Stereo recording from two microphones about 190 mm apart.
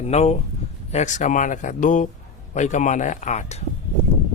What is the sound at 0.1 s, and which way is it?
Speech, 35° left (ahead or behind).